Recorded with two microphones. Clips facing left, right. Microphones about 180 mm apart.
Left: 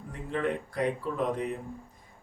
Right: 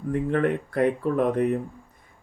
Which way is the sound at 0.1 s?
60° right (ahead or behind).